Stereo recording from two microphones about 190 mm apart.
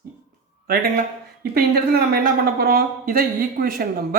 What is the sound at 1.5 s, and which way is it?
Speech, 55° right (ahead or behind).